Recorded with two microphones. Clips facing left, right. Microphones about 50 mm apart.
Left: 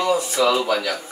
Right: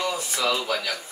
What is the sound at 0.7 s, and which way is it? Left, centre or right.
Speech, centre.